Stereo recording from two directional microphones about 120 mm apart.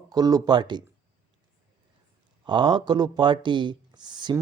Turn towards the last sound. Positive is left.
turn(degrees=-40)  # may be behind; listen again after turning